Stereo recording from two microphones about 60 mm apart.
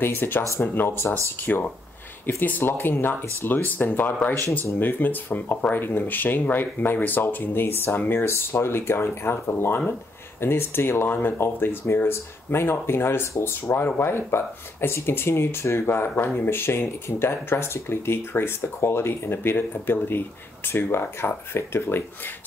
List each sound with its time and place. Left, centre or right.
0.0 s speech: left